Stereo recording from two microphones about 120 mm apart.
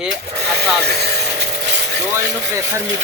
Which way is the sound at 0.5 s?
20° right (ahead or behind).